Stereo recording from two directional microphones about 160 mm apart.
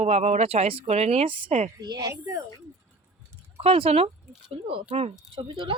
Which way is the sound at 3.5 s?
35° right (ahead or behind).